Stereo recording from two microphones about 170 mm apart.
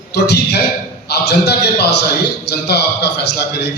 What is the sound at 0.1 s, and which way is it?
A man's voice, 80° left.